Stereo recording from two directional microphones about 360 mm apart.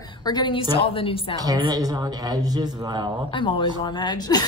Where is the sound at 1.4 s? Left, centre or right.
Centre.